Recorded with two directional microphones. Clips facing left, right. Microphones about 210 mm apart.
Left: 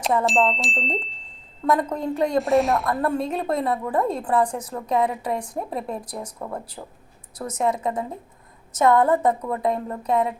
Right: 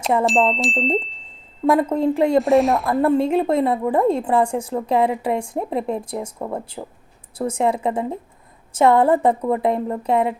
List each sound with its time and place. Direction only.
0.3 s chime: centre (ahead or behind)
1.6 s a woman's voice: 30° right (ahead or behind)
2.4 s chime: centre (ahead or behind)
2.8 s a woman's voice: 25° right (ahead or behind)